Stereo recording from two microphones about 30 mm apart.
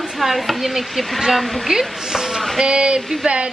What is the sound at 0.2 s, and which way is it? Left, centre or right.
A woman's voice, centre.